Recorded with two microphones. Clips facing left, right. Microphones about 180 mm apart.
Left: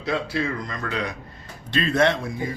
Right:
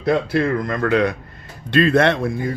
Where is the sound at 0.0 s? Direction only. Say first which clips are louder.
Right 7 dB; 55° right (ahead or behind).